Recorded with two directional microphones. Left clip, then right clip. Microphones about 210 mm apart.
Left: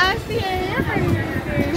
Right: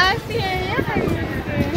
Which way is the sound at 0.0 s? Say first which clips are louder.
Right 1 dB; 15° right (ahead or behind).